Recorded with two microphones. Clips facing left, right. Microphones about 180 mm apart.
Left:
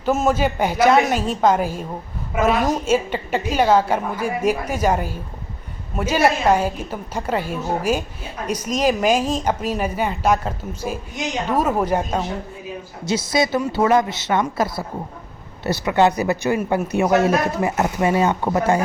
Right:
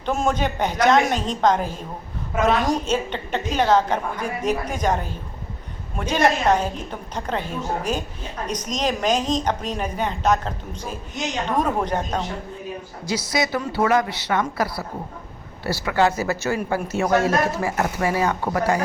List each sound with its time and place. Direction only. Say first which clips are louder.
0.0 s a woman's voice: left 4 dB; 5° left (ahead or behind)
13.1 s a woman's voice: left 4 dB; 25° left (ahead or behind)